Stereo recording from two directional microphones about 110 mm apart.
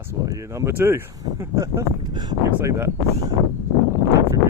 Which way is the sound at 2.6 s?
20° right (ahead or behind).